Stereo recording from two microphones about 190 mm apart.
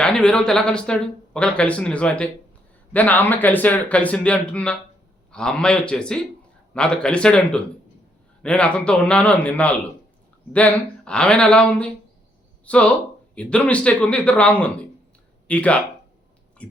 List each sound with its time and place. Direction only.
0.0 s speech: 5° left (ahead or behind)